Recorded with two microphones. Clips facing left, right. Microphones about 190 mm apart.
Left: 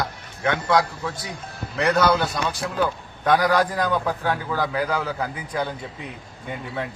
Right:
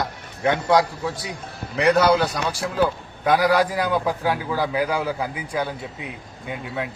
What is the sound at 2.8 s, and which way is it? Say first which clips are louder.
A man's voice: right 3 dB; 5° right (ahead or behind).